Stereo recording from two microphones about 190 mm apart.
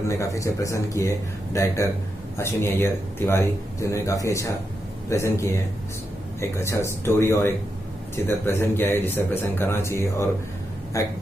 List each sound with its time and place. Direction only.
0.1 s speech: 15° left (ahead or behind)